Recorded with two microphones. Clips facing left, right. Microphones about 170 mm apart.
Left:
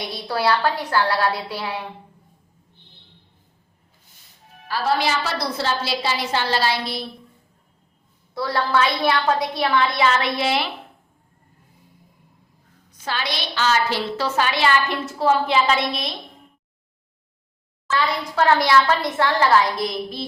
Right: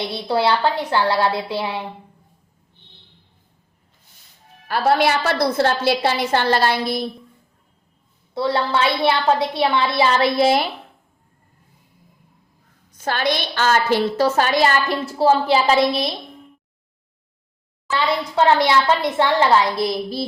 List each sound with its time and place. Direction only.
0.0 s a woman's voice: 25° right (ahead or behind)
4.7 s a woman's voice: 60° right (ahead or behind)
8.4 s a woman's voice: 25° right (ahead or behind); by 10.7 s 40° right (ahead or behind)
13.0 s a woman's voice: 50° right (ahead or behind); by 16.1 s 35° right (ahead or behind)
18.3 s a woman's voice: 25° right (ahead or behind)